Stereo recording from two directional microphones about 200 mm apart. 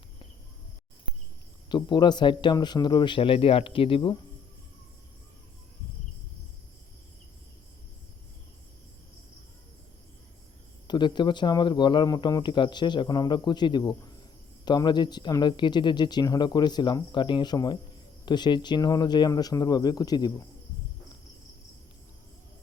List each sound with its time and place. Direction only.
1.7 s speech: 20° left (ahead or behind)
10.8 s speech: 20° left (ahead or behind)